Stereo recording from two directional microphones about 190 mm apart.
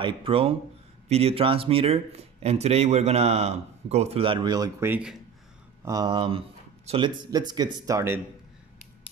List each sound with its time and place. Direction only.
0.0 s speech: 30° right (ahead or behind); by 5.1 s 10° right (ahead or behind)
5.9 s speech: 20° right (ahead or behind)